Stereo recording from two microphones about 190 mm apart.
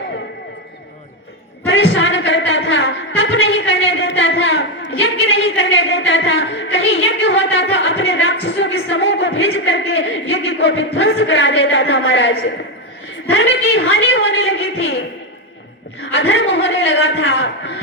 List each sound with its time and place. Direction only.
1.6 s music: 90° left
8.4 s speech: 85° left
13.3 s a woman's voice: 90° left
16.1 s a sound: 90° left